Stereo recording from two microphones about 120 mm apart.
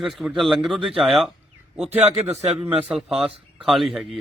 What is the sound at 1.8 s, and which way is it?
Speech, 65° right (ahead or behind).